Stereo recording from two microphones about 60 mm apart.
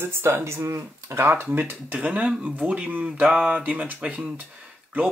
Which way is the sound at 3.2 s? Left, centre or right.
Centre.